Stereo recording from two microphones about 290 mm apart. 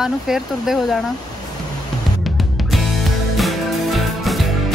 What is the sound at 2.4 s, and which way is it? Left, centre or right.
Music, centre.